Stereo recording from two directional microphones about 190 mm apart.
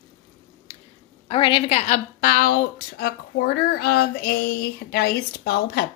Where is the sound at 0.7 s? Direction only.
25° left (ahead or behind).